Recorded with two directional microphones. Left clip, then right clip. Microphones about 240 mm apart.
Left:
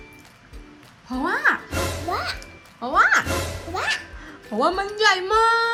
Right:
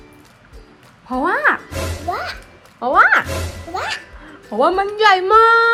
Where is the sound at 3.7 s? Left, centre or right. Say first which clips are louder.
Right 1 dB; centre.